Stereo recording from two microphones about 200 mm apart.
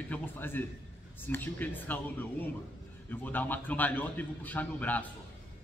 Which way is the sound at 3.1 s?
10° left (ahead or behind).